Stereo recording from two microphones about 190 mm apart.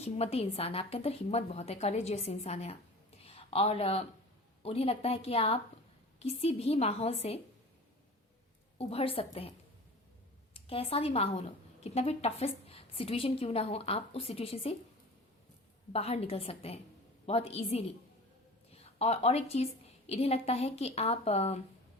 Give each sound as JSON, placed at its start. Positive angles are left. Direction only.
{"t": 0.0, "sound": "a woman's voice", "side_deg": 30}
{"t": 8.8, "sound": "a woman's voice", "side_deg": 30}
{"t": 10.5, "sound": "a woman's voice", "side_deg": 30}
{"t": 15.9, "sound": "a woman's voice", "side_deg": 30}